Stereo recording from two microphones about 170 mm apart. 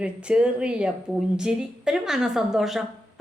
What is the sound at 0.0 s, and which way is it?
Speech, 5° right (ahead or behind).